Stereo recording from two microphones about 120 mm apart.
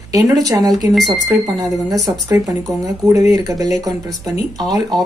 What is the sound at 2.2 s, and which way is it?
A woman's voice, 25° right (ahead or behind).